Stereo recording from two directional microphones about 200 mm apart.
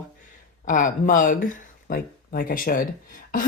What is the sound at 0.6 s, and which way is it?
Speech, 40° left (ahead or behind).